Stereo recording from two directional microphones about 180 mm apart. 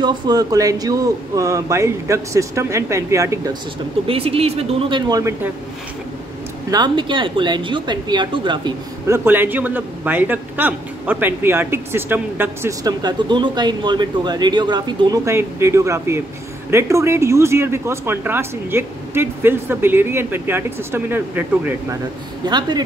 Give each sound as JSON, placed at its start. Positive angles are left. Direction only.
{"t": 0.0, "sound": "speech", "side_deg": -25}
{"t": 4.1, "sound": "speech", "side_deg": -30}
{"t": 6.7, "sound": "speech", "side_deg": -25}
{"t": 22.5, "sound": "speech", "side_deg": -25}